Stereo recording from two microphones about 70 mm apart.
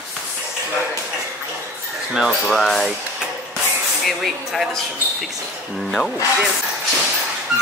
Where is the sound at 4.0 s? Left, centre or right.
Centre.